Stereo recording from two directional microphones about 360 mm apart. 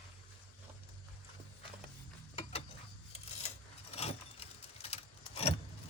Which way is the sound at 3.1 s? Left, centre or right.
Centre.